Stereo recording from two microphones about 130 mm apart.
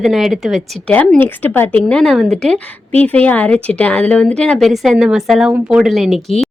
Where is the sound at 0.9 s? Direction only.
15° left (ahead or behind).